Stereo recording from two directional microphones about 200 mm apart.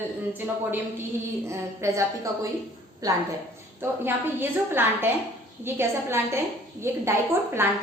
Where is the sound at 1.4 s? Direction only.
15° right (ahead or behind).